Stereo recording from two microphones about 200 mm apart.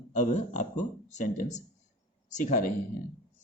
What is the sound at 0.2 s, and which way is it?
A man's voice, 35° left (ahead or behind).